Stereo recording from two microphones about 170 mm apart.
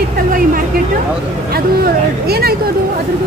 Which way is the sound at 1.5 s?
65° right (ahead or behind).